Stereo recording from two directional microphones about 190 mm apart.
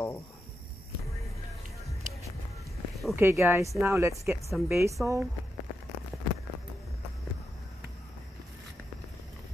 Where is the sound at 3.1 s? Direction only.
10° right (ahead or behind).